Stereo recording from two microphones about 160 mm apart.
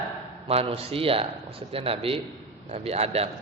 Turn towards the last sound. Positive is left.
turn(degrees=-40)  # may be behind; listen again after turning